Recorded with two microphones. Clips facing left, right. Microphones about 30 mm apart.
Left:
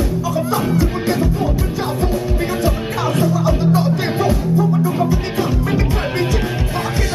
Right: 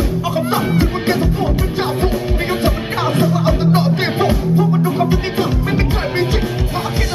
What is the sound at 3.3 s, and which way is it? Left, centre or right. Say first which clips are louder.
Music: right 1 dB; right.